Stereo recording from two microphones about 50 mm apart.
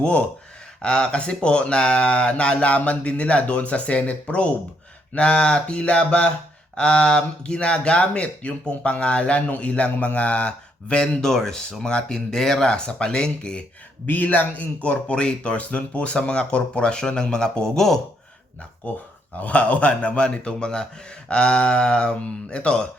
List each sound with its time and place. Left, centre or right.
0.0 s speech: left
14.1 s speech: left; by 17.7 s centre
17.7 s speech: centre
19.4 s speech: left